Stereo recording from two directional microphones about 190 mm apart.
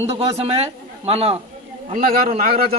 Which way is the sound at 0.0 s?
35° right (ahead or behind).